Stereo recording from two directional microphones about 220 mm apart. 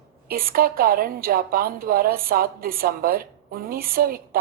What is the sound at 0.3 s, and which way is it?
A woman's voice, 40° right (ahead or behind).